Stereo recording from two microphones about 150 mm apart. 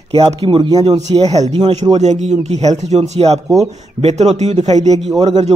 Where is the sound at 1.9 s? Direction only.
50° right (ahead or behind).